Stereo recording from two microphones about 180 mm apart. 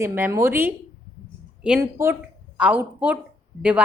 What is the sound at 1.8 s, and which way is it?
A woman's voice, 15° right (ahead or behind).